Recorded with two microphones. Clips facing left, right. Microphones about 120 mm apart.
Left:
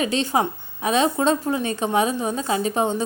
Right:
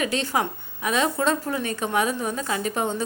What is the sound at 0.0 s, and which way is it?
A woman's voice, 25° left (ahead or behind).